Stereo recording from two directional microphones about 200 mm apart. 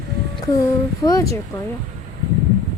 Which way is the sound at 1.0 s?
15° left (ahead or behind).